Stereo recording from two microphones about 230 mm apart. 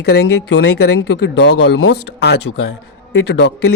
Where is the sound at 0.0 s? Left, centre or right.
Left.